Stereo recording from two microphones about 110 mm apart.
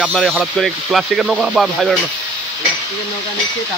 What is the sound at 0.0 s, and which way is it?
Speech, 5° left (ahead or behind).